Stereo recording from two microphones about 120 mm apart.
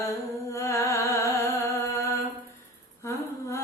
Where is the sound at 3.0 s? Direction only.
25° left (ahead or behind).